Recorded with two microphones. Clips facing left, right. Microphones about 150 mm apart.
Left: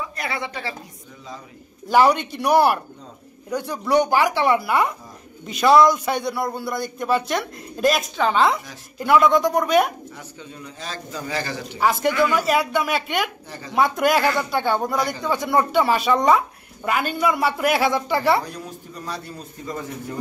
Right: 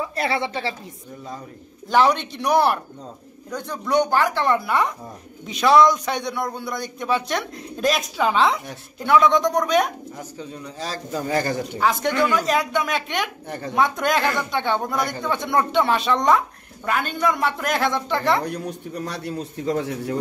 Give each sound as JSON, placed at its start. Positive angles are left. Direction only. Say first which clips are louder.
{"t": 0.1, "sound": "speech", "louder": "right 5 dB", "side_deg": -30}
{"t": 1.9, "sound": "a man's voice", "louder": "left 2 dB", "side_deg": 10}
{"t": 10.8, "sound": "a man's voice", "louder": "right 5 dB", "side_deg": -40}
{"t": 11.8, "sound": "a man's voice", "louder": "left 2 dB", "side_deg": 5}
{"t": 13.5, "sound": "speech", "louder": "right 6 dB", "side_deg": -55}
{"t": 13.7, "sound": "a man's voice", "louder": "left 2 dB", "side_deg": 5}
{"t": 18.4, "sound": "a man's voice", "louder": "right 5 dB", "side_deg": -65}